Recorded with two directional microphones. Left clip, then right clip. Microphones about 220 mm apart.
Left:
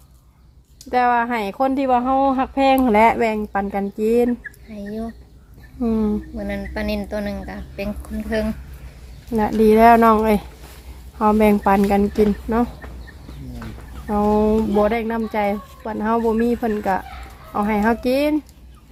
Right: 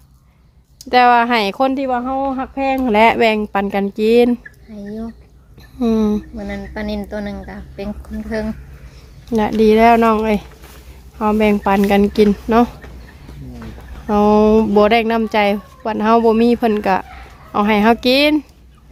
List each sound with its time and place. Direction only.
0.9 s speech: 25° right (ahead or behind)
1.7 s speech: 5° left (ahead or behind)
2.8 s speech: 5° right (ahead or behind)
4.7 s speech: 5° right (ahead or behind)
5.8 s speech: 20° right (ahead or behind)
6.3 s speech: 5° right (ahead or behind)
12.5 s speech: 30° right (ahead or behind)
14.1 s speech: 35° right (ahead or behind)